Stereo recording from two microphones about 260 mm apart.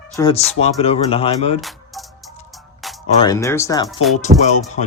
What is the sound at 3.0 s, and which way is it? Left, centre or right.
Speech, centre.